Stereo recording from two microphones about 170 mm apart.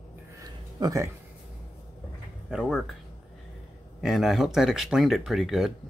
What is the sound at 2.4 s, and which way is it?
Speech, centre (ahead or behind).